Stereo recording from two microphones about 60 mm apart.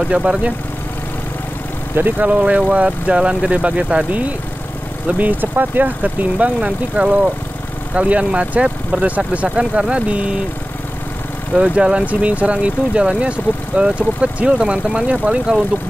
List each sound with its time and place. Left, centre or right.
0.1 s speech: centre
2.0 s speech: right
11.5 s speech: centre